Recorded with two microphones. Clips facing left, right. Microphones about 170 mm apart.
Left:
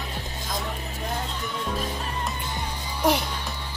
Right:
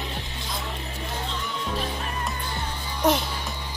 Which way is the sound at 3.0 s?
10° left (ahead or behind).